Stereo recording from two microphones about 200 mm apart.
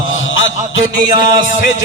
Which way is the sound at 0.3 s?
75° left (ahead or behind).